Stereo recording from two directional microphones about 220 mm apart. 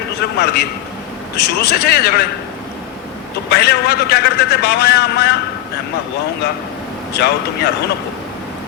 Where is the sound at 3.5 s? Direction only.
50° left (ahead or behind).